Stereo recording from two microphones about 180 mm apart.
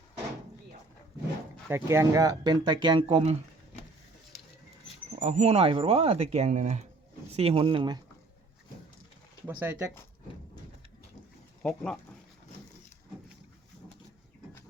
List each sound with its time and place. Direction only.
1.7 s speech: 15° right (ahead or behind)
5.2 s speech: 35° right (ahead or behind)
7.3 s speech: 30° right (ahead or behind)
9.5 s speech: 10° right (ahead or behind)
11.6 s speech: 5° left (ahead or behind)